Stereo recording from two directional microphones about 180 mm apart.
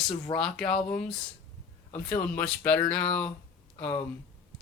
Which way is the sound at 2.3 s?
5° left (ahead or behind).